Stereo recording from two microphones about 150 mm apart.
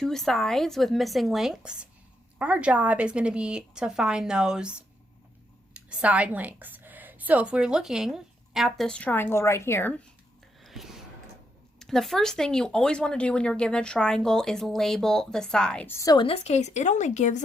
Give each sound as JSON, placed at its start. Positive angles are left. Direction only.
{"t": 0.0, "sound": "a woman's voice", "side_deg": 5}
{"t": 10.6, "sound": "a sound", "side_deg": 0}
{"t": 11.8, "sound": "speech", "side_deg": 5}
{"t": 16.0, "sound": "a woman's voice", "side_deg": 25}
{"t": 16.2, "sound": "a woman's voice", "side_deg": 45}